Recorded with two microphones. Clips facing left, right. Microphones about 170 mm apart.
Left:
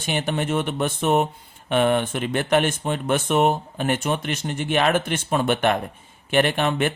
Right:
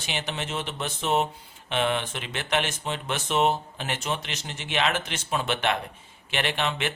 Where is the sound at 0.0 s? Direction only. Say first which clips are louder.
Left 8 dB; 50° left (ahead or behind).